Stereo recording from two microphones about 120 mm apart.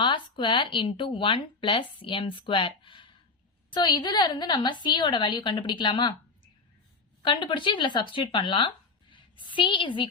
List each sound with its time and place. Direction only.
0.0 s a woman's voice: 40° left (ahead or behind)
7.2 s speech: 40° left (ahead or behind)